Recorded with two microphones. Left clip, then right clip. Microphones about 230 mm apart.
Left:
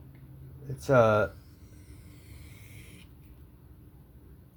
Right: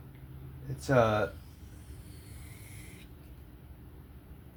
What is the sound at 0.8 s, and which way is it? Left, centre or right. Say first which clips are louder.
Speech: left 4 dB; left.